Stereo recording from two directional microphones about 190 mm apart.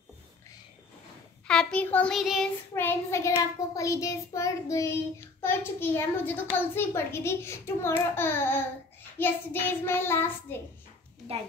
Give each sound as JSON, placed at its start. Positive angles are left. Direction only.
{"t": 1.5, "sound": "child singing", "side_deg": 5}
{"t": 2.7, "sound": "child singing", "side_deg": 10}